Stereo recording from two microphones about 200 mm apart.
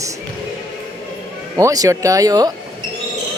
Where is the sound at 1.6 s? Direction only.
15° right (ahead or behind).